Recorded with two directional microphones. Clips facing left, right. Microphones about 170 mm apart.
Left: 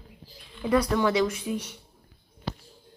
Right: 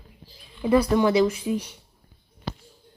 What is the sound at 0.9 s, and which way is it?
Speech, 20° right (ahead or behind).